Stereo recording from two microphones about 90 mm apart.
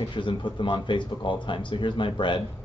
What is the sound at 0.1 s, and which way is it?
Speech, 65° left (ahead or behind).